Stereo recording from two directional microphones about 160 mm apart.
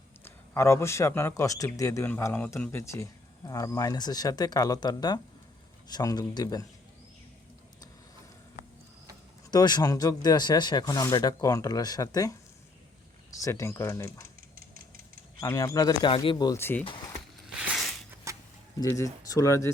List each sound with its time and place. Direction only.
0.3 s a man's voice: 15° left (ahead or behind)
9.5 s a man's voice: 25° left (ahead or behind)
13.4 s a man's voice: 20° left (ahead or behind)
15.4 s a man's voice: 20° left (ahead or behind)
16.6 s speech: 15° left (ahead or behind)
17.6 s a sound: 5° right (ahead or behind)
18.3 s a sound: 20° right (ahead or behind)
18.8 s a man's voice: 20° left (ahead or behind)